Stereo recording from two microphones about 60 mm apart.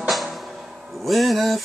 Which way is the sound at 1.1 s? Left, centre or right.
Centre.